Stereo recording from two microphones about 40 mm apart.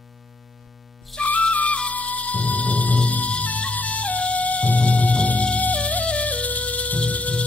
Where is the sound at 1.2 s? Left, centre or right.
Left.